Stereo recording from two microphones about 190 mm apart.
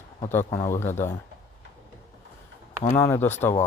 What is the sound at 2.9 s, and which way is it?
Speech, 15° left (ahead or behind).